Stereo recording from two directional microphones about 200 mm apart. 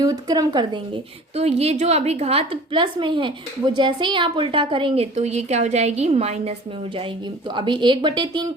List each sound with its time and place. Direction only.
0.0 s a woman's voice: 20° right (ahead or behind)
7.5 s speech: 25° right (ahead or behind)